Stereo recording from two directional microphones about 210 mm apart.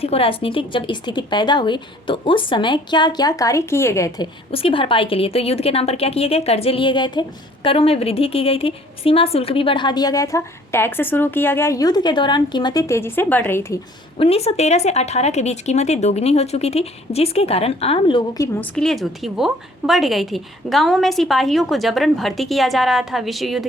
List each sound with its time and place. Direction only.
0.0 s a woman's voice: 30° left (ahead or behind)
4.5 s a woman's voice: 25° left (ahead or behind)
14.2 s speech: 30° left (ahead or behind)
18.6 s a woman's voice: 5° left (ahead or behind)